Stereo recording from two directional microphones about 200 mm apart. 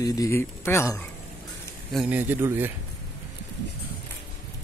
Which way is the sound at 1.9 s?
5° right (ahead or behind).